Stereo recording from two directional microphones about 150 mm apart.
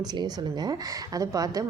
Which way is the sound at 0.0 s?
30° right (ahead or behind).